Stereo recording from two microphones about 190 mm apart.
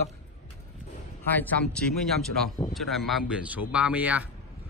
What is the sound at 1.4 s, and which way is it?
A man's voice, 5° left (ahead or behind).